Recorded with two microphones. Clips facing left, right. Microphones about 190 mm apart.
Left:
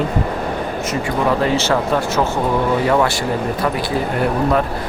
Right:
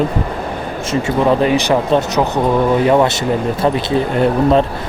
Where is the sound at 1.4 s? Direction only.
15° right (ahead or behind).